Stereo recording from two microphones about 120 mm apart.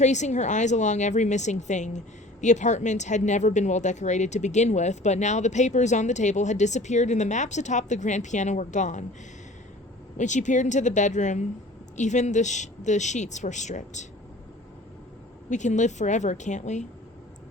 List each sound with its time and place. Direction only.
0.0 s speech: 75° left (ahead or behind)
10.2 s speech: 90° left
15.4 s speech: 85° left